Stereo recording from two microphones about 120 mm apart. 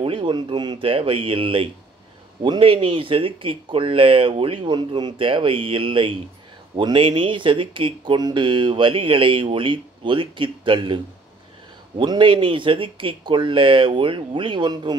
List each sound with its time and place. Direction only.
0.0 s speech: 45° right (ahead or behind)
12.0 s speech: 40° right (ahead or behind)